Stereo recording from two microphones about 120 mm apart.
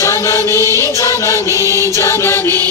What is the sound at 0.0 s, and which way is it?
Chant, 25° left (ahead or behind).